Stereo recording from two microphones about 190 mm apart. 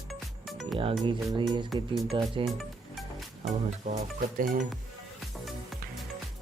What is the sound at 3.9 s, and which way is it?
Speech, 45° right (ahead or behind).